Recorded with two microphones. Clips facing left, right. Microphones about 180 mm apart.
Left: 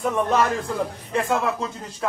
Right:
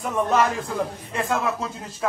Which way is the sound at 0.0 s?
Centre (ahead or behind).